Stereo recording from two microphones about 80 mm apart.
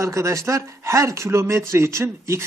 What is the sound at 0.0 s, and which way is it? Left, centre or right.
Speech, right.